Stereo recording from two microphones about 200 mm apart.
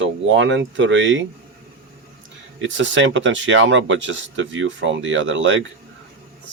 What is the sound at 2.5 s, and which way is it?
Speech, 70° right (ahead or behind).